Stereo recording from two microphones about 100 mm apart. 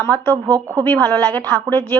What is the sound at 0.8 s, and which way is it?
A woman's voice, 25° left (ahead or behind).